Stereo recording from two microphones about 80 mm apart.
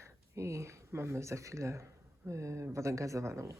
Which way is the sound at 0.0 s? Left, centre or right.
Right.